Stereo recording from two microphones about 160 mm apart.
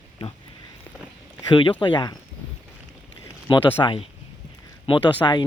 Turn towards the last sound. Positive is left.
turn(degrees=30)  # may be behind; listen again after turning